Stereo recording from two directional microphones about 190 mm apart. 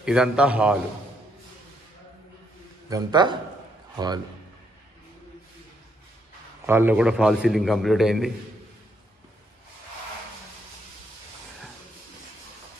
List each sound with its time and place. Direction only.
0.0 s a man's voice: 5° right (ahead or behind)
2.9 s a man's voice: 20° right (ahead or behind)
6.6 s a man's voice: 10° right (ahead or behind)